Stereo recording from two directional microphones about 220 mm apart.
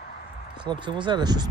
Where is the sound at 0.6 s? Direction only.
20° right (ahead or behind).